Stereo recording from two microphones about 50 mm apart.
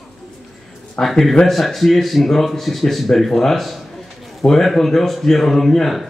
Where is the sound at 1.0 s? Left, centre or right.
Centre.